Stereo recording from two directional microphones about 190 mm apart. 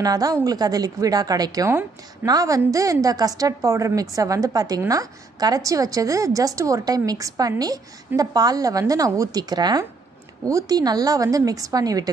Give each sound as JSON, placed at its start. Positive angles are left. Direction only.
{"t": 0.0, "sound": "a woman's voice", "side_deg": -20}